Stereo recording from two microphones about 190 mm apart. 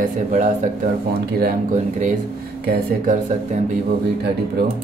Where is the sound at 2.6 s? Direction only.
40° right (ahead or behind).